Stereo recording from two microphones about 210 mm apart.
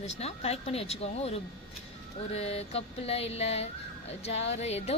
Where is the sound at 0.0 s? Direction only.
30° left (ahead or behind).